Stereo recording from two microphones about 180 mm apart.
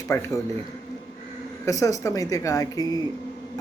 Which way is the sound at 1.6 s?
20° left (ahead or behind).